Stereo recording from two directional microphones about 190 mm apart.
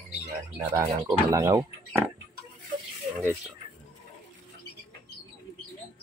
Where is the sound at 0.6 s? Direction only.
15° right (ahead or behind).